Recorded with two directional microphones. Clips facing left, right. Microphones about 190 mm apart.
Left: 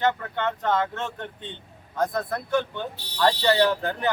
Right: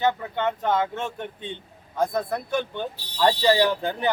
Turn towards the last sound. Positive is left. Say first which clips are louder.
# even
turn(degrees=-15)  # may be behind; listen again after turning